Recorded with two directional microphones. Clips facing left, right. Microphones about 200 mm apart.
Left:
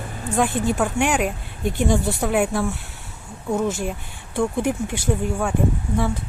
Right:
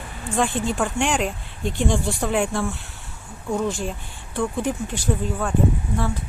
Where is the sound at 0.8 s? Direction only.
5° left (ahead or behind).